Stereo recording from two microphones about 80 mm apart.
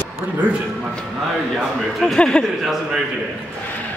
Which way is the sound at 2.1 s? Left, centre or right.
Centre.